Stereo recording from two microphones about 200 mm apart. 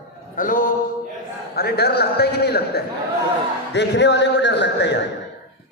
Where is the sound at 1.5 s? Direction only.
50° left (ahead or behind).